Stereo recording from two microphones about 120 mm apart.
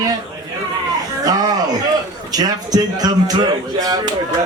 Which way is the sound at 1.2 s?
30° right (ahead or behind).